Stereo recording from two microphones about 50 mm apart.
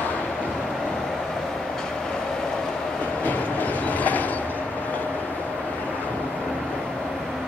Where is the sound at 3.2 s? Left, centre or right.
Left.